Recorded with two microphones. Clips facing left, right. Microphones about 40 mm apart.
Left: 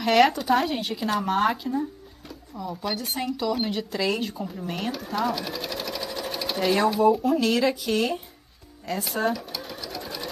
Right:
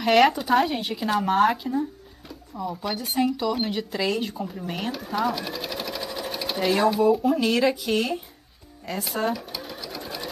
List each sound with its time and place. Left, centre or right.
0.0 s speech: centre
8.8 s sewing machine: centre